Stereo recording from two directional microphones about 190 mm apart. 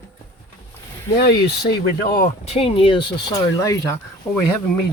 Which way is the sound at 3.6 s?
15° left (ahead or behind).